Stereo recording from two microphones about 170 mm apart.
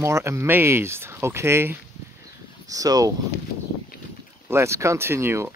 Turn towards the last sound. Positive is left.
turn(degrees=-15)  # may be behind; listen again after turning